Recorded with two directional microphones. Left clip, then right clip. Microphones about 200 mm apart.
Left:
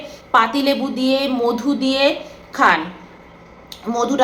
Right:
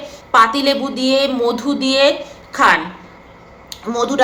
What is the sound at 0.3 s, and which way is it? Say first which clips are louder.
A woman's voice: right 3 dB; centre (ahead or behind).